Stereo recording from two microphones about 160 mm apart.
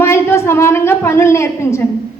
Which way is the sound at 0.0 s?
15° left (ahead or behind).